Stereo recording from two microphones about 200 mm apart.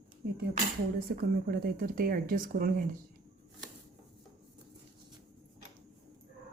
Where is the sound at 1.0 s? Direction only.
45° right (ahead or behind).